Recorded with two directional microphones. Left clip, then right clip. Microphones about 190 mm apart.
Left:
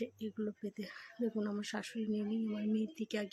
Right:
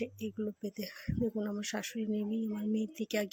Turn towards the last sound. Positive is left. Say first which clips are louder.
# right 5 dB
turn(degrees=-15)  # may be behind; listen again after turning